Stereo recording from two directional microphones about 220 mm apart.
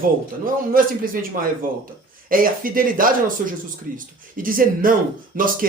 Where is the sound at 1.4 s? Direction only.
40° right (ahead or behind).